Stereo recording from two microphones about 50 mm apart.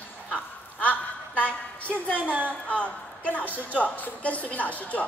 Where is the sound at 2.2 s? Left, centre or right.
Right.